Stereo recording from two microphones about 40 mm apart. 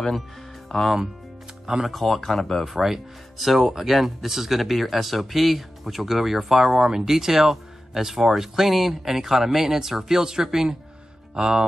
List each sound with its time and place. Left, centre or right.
0.7 s speech: centre
1.9 s speech: centre
2.7 s speech: centre